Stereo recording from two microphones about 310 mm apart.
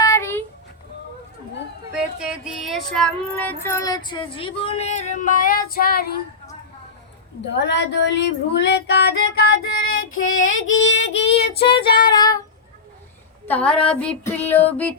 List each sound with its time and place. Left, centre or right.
0.0 s a sound: centre
2.1 s child singing: centre; by 6.6 s left
7.6 s female singing: left
11.1 s child singing: centre
13.4 s female singing: centre